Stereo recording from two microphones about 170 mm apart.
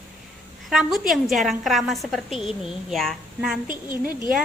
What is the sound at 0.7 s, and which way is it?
A woman's voice, centre (ahead or behind).